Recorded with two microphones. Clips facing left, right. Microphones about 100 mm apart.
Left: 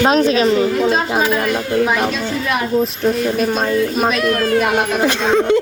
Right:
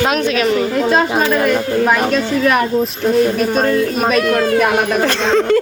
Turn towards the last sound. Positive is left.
turn(degrees=15)  # may be behind; listen again after turning